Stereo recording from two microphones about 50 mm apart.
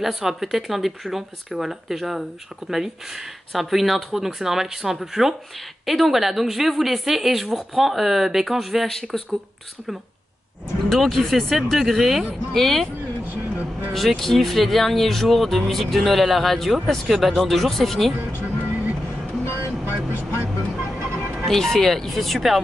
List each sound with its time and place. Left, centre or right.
0.0 s speech: centre
10.9 s speech: centre
12.5 s speech: centre
13.9 s speech: centre
18.4 s music: right
19.5 s vehicle: right
20.8 s music: right
21.5 s speech: centre